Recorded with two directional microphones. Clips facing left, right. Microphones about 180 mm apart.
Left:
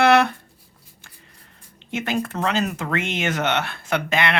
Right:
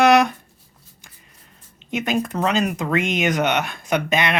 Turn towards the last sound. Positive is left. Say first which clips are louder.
# right 2 dB
turn(degrees=-20)  # may be behind; listen again after turning